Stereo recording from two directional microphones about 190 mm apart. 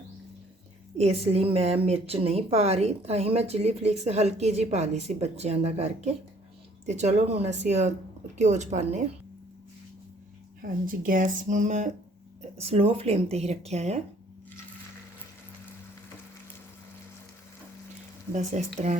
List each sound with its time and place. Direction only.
0.9 s a woman's voice: 35° right (ahead or behind)
10.6 s a woman's voice: 45° right (ahead or behind)
18.5 s a woman's voice: 40° right (ahead or behind)